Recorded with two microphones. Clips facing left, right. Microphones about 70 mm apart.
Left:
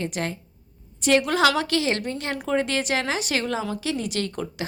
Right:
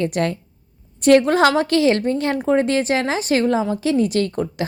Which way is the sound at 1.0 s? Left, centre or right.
Right.